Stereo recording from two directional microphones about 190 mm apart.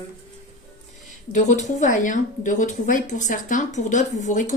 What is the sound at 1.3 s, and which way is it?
A woman's voice, 40° left (ahead or behind).